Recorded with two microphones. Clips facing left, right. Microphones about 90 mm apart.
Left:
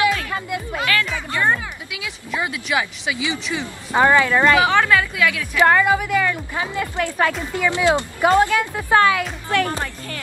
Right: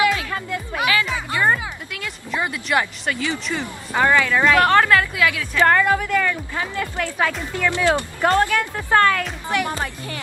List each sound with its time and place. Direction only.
0.7 s music: 15° right (ahead or behind)
1.9 s speech: 5° left (ahead or behind)
3.9 s speech: 20° left (ahead or behind)
4.5 s a woman's voice: centre (ahead or behind)
7.2 s speech: centre (ahead or behind)
7.5 s a woman's voice: 15° left (ahead or behind)
9.5 s speech: 20° right (ahead or behind)